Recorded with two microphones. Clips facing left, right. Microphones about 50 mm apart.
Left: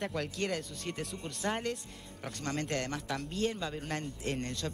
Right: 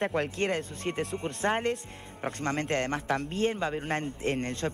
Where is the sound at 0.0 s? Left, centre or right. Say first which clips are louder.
Right 6 dB; right.